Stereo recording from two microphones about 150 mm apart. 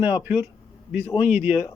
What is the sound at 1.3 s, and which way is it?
Speech, 10° right (ahead or behind).